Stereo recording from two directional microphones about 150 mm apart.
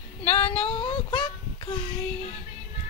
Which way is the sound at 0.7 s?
35° left (ahead or behind).